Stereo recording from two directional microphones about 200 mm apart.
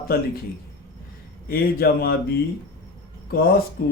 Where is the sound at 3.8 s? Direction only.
55° left (ahead or behind).